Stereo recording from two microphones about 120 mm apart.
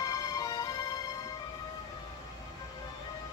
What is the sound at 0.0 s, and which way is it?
Music, 30° left (ahead or behind).